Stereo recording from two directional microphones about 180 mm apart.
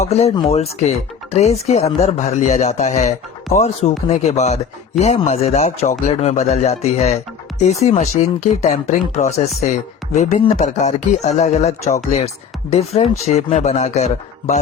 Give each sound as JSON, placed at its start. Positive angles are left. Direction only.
{"t": 0.0, "sound": "speech", "side_deg": 35}